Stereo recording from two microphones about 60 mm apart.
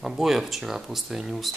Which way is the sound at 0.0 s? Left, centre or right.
Centre.